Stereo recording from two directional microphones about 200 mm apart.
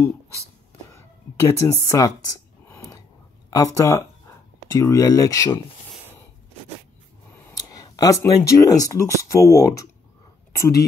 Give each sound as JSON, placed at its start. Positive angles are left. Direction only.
{"t": 0.9, "sound": "a sound", "side_deg": 15}
{"t": 3.4, "sound": "speech", "side_deg": 15}
{"t": 7.3, "sound": "speech", "side_deg": 20}